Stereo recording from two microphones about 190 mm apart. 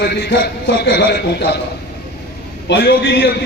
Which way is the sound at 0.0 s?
60° left (ahead or behind).